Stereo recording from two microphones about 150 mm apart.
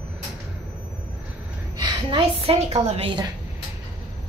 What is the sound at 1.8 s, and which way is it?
A woman's voice, 35° right (ahead or behind).